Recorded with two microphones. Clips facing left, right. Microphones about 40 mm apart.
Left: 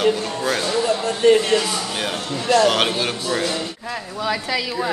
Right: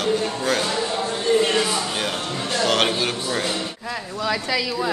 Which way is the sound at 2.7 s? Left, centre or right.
Centre.